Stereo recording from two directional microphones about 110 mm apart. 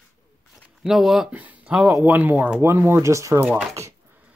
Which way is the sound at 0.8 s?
5° right (ahead or behind).